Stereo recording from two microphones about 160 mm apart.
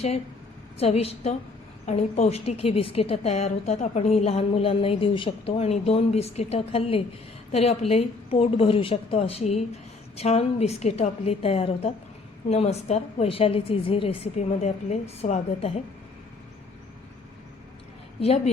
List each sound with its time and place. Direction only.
0.8 s a woman's voice: 40° left (ahead or behind)
18.2 s a woman's voice: 40° left (ahead or behind)